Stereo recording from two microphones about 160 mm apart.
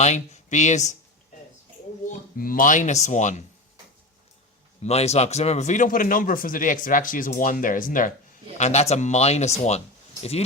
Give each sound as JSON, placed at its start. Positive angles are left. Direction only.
{"t": 0.0, "sound": "speech", "side_deg": 45}
{"t": 2.0, "sound": "speech", "side_deg": 60}
{"t": 4.8, "sound": "speech", "side_deg": 40}
{"t": 8.5, "sound": "speech", "side_deg": 45}